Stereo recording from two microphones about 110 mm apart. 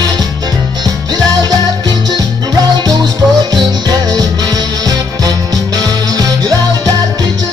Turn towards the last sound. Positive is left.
turn(degrees=-35)  # may be behind; listen again after turning